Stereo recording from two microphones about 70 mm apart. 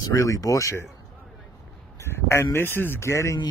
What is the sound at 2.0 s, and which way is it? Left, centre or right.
Speech, left.